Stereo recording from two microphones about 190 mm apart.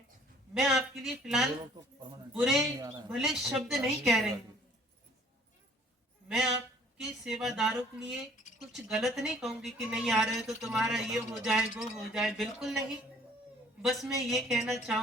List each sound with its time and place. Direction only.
0.5 s speech: centre (ahead or behind)
1.8 s speech: 20° right (ahead or behind)
2.3 s speech: centre (ahead or behind)
2.7 s speech: 20° right (ahead or behind)
3.1 s speech: centre (ahead or behind)
6.2 s speech: centre (ahead or behind)
13.8 s speech: centre (ahead or behind)